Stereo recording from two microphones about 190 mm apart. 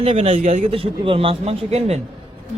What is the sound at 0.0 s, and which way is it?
A man's voice, 30° right (ahead or behind).